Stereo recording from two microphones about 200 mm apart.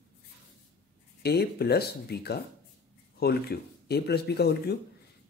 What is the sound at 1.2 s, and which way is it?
Speech, 55° left (ahead or behind).